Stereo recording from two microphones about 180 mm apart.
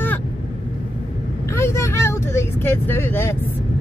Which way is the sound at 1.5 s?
15° left (ahead or behind).